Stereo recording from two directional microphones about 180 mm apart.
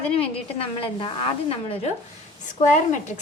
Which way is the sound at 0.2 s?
30° left (ahead or behind).